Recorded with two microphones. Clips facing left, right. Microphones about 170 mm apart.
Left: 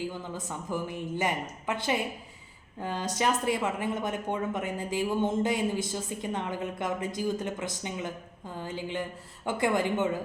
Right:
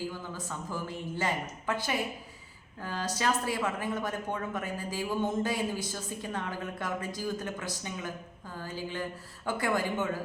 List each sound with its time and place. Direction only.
0.0 s speech: 20° left (ahead or behind)